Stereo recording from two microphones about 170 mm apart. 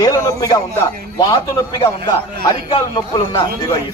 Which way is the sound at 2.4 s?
25° left (ahead or behind).